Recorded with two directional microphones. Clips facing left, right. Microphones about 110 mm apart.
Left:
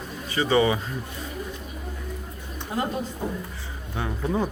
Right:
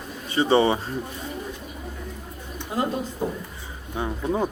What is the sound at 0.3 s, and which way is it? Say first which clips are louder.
Speech: right 2 dB; 25° right (ahead or behind).